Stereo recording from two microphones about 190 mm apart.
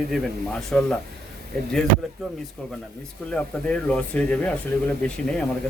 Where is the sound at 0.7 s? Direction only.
5° left (ahead or behind).